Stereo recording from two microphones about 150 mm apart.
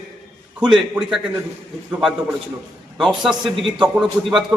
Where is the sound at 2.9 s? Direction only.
5° right (ahead or behind).